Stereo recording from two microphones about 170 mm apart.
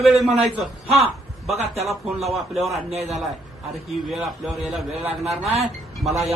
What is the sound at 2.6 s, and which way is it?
Speech, 40° right (ahead or behind).